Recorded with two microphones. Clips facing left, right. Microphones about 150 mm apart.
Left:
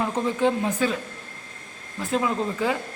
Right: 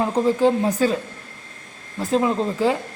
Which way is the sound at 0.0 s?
35° right (ahead or behind).